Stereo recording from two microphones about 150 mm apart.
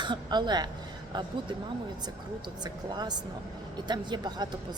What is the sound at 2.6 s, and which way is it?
A woman's voice, 30° right (ahead or behind).